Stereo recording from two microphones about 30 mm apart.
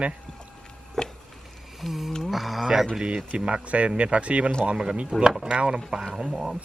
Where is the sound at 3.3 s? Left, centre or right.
Right.